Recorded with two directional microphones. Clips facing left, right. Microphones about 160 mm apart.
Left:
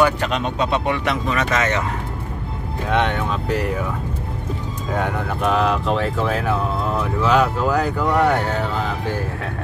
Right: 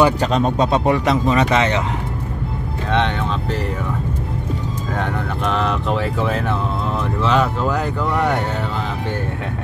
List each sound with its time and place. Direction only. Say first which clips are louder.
0.0 s speech: right 3 dB; 35° right (ahead or behind)
1.4 s speech: right 3 dB; 20° right (ahead or behind)
2.9 s speech: even; 10° left (ahead or behind)
4.9 s speech: left 2 dB; 5° left (ahead or behind)